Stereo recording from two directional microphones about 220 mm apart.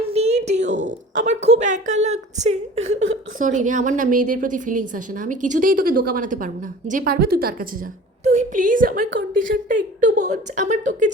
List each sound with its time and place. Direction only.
0.1 s a woman's voice: 30° right (ahead or behind)
8.2 s a woman's voice: 30° right (ahead or behind)